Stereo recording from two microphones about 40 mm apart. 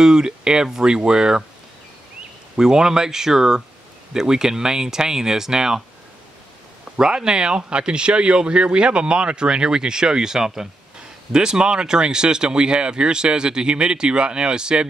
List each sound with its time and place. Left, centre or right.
0.0 s speech: centre
2.5 s speech: centre
7.0 s speech: centre